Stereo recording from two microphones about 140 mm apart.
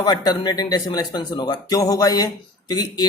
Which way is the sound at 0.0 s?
30° left (ahead or behind).